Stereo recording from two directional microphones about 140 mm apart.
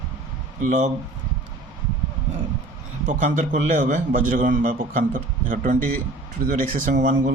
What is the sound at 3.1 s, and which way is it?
A man's voice, 65° right (ahead or behind).